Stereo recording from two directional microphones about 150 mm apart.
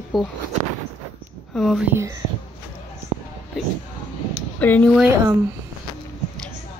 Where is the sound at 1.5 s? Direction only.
Centre (ahead or behind).